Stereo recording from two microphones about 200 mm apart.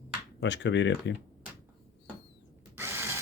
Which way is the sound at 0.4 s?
60° left (ahead or behind).